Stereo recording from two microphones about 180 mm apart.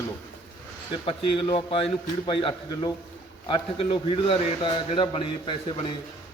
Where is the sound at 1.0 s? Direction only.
30° left (ahead or behind).